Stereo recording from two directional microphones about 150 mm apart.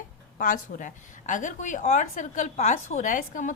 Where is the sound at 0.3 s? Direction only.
60° left (ahead or behind).